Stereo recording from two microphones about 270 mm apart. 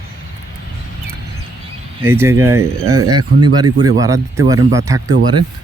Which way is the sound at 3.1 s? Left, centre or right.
Right.